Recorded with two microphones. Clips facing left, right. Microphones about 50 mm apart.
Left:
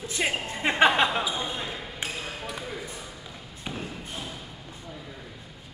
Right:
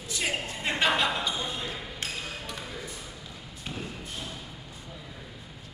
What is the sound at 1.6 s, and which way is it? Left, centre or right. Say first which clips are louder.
Basketball bounce: left 1 dB; centre.